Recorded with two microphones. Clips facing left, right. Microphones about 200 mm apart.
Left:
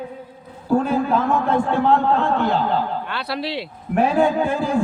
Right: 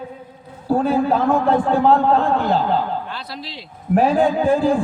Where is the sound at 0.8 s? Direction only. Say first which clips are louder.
Right 5 dB; 35° right (ahead or behind).